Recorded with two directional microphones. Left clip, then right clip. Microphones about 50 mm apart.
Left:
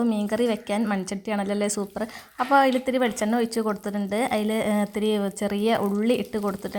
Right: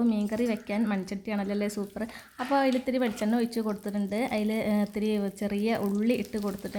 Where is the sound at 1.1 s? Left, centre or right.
Left.